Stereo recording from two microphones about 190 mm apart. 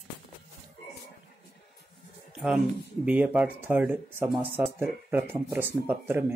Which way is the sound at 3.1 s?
5° right (ahead or behind).